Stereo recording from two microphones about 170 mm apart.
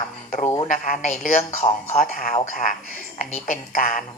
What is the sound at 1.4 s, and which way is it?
Speech, 40° left (ahead or behind).